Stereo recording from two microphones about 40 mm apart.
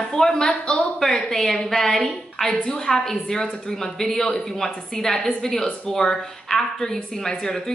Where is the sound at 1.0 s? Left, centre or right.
Centre.